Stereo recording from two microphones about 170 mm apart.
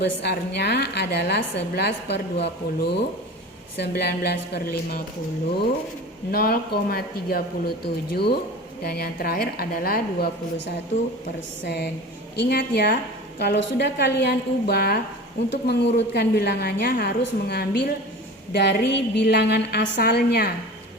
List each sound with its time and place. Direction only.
0.0 s a woman's voice: 75° left (ahead or behind)
6.3 s a woman's voice: 65° left (ahead or behind)
11.6 s a woman's voice: 75° left (ahead or behind)
18.5 s a woman's voice: 75° left (ahead or behind)